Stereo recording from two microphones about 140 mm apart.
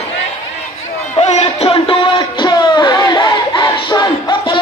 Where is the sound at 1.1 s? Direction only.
50° left (ahead or behind); by 4.5 s 30° left (ahead or behind).